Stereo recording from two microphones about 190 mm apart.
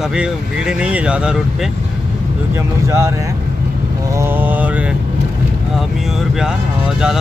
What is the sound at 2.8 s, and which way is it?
Speech, 15° right (ahead or behind).